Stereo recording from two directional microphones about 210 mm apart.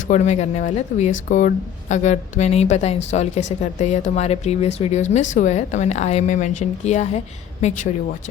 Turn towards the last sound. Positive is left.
turn(degrees=35)  # may be behind; listen again after turning